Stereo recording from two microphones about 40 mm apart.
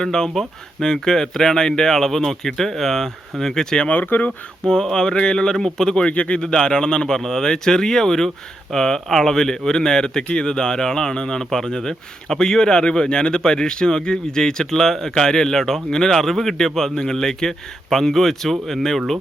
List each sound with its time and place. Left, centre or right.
0.0 s speech: centre
3.8 s speech: left
4.6 s speech: centre
5.5 s speech: centre
5.8 s speech: centre
6.1 s speech: left; by 19.2 s centre